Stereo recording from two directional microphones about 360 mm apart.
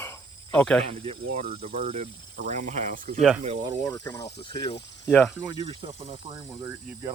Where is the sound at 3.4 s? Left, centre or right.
Centre.